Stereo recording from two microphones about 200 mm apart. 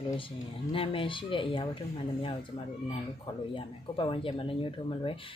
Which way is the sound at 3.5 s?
25° left (ahead or behind).